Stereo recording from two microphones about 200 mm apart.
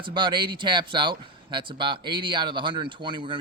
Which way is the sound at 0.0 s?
25° right (ahead or behind).